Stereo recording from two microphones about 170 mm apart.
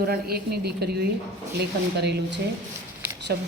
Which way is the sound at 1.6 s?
80° right.